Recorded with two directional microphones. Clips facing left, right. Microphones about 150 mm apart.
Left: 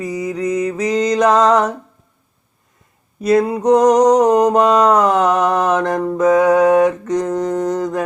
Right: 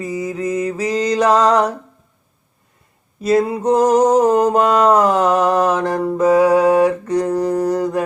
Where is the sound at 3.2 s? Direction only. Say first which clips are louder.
Left 1 dB; 30° right (ahead or behind).